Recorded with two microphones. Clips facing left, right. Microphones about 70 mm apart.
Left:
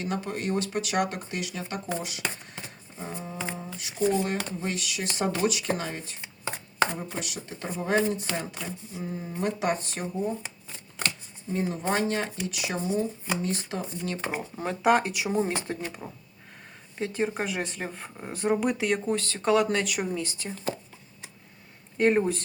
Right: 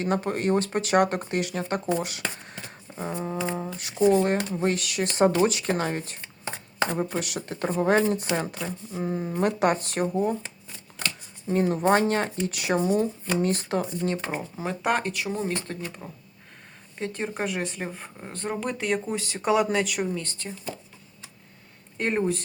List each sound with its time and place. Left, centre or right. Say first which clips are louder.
0.0 s speech: right 5 dB; right
5.1 s speech: right 6 dB; right
7.7 s speech: right 4 dB; right
11.4 s speech: right 6 dB; right
14.2 s speech: right 1 dB; centre
14.5 s speech: left 4 dB; centre
19.2 s speech: right 2 dB; centre
21.9 s speech: left 3 dB; centre